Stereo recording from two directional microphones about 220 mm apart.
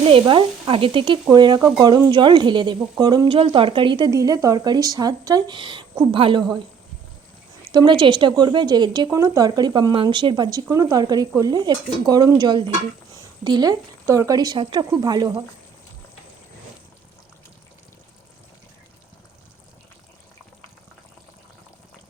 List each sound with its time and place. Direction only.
0.0 s speech: 25° right (ahead or behind)
7.7 s speech: 20° right (ahead or behind)